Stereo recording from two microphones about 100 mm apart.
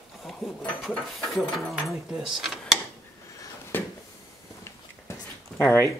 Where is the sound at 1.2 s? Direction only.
Centre (ahead or behind).